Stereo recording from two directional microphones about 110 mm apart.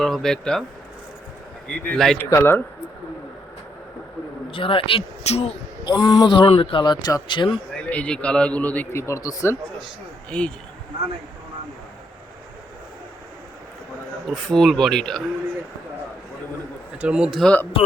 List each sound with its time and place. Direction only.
0.0 s speech: 5° left (ahead or behind)
1.9 s speech: 5° left (ahead or behind)
2.1 s speech: 20° left (ahead or behind)
4.5 s speech: 55° left (ahead or behind); by 5.5 s 70° left (ahead or behind)
5.8 s speech: 45° left (ahead or behind)
7.9 s speech: 10° left (ahead or behind); by 9.6 s 30° left (ahead or behind)
10.2 s speech: 10° left (ahead or behind)
14.3 s speech: 5° left (ahead or behind)
17.0 s speech: 10° right (ahead or behind)
17.4 s speech: 15° left (ahead or behind)